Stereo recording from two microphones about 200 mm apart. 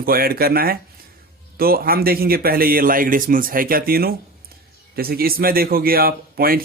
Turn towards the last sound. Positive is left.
turn(degrees=-45)  # may be behind; listen again after turning